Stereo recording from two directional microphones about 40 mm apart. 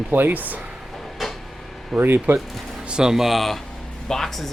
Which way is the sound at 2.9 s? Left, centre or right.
Centre.